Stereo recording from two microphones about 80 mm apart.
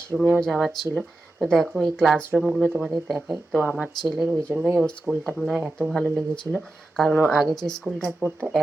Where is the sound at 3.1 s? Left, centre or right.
Centre.